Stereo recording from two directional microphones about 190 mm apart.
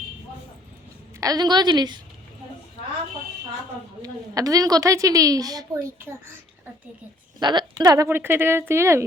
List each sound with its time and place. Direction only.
1.2 s a woman's voice: 20° right (ahead or behind)
4.0 s a woman's voice: 20° right (ahead or behind)
7.3 s speech: 20° right (ahead or behind)